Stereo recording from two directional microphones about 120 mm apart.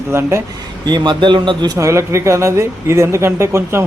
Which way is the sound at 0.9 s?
40° right (ahead or behind).